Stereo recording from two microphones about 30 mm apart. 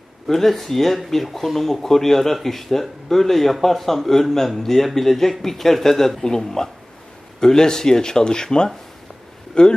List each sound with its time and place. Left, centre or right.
0.3 s speech: centre; by 9.7 s left